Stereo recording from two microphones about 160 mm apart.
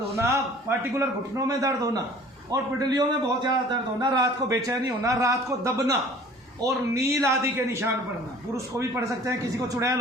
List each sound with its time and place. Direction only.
0.2 s a man's voice: 15° right (ahead or behind)